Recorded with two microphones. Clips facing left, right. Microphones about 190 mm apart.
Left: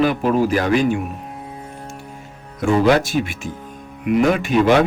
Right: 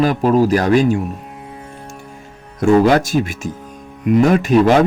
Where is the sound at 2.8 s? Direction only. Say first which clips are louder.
Right 1 dB; 45° right (ahead or behind).